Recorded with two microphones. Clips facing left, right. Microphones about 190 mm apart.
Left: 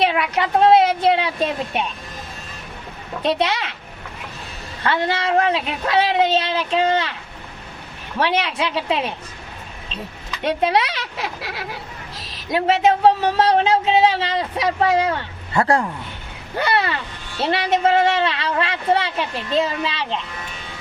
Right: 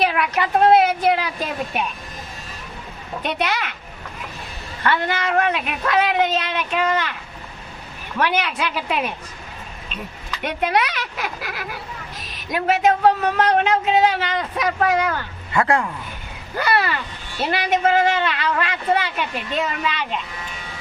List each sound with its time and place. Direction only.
0.0 s speech: 25° left (ahead or behind)
3.2 s speech: 30° left (ahead or behind)
4.8 s speech: 30° left (ahead or behind)
8.2 s speech: 25° left (ahead or behind)
10.4 s speech: 30° left (ahead or behind)